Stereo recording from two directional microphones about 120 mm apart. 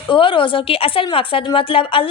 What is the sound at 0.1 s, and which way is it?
A woman's voice, 45° left (ahead or behind).